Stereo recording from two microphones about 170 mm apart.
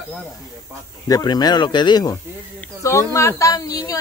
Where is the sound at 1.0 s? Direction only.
20° left (ahead or behind).